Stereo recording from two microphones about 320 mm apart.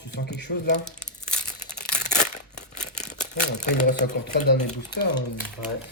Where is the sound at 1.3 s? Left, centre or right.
Left.